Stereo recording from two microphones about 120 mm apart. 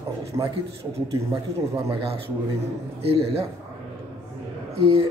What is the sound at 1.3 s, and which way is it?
Speech, 30° right (ahead or behind).